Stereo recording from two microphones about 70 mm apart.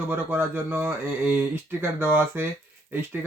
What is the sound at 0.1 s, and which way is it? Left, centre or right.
Speech, right.